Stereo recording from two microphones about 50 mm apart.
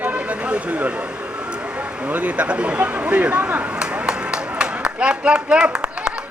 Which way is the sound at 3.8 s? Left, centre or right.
Centre.